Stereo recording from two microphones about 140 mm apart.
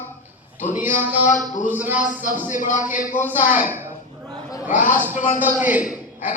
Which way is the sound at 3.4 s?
65° left (ahead or behind).